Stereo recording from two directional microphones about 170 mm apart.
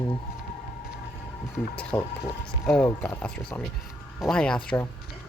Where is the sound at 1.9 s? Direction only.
10° left (ahead or behind).